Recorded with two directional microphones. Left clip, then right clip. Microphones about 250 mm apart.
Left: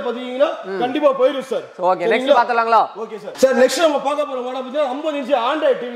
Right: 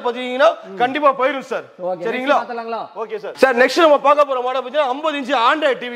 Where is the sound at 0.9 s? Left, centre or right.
Right.